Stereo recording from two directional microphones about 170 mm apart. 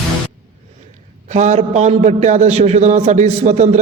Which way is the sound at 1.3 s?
45° right (ahead or behind).